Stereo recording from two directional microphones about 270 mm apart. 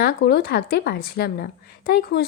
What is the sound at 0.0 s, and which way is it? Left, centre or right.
Speech, left.